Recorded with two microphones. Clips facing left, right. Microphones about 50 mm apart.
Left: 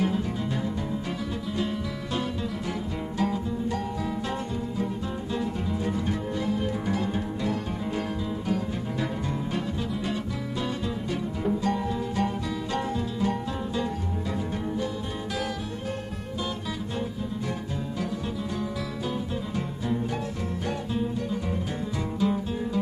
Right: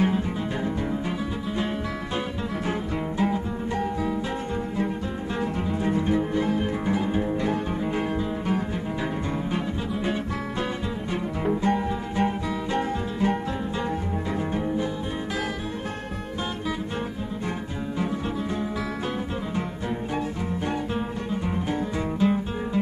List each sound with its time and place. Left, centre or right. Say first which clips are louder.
3.2 s music: even; right
5.3 s music: right 2 dB; right
11.1 s music: right 3 dB; right
20.1 s music: right 3 dB; right